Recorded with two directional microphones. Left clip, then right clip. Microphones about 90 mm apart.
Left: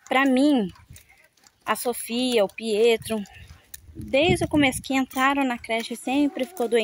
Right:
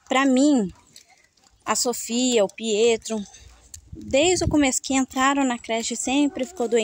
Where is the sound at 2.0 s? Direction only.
40° right (ahead or behind).